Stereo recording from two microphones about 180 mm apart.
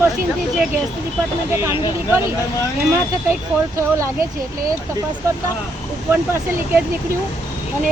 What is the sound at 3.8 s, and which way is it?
Speech, 15° right (ahead or behind).